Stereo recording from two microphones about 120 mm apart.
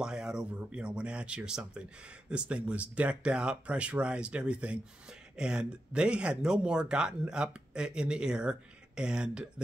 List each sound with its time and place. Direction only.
0.0 s speech: 5° right (ahead or behind)